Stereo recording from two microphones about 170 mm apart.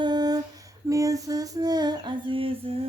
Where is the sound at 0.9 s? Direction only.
20° right (ahead or behind).